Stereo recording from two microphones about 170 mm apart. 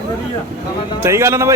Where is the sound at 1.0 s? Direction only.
15° right (ahead or behind).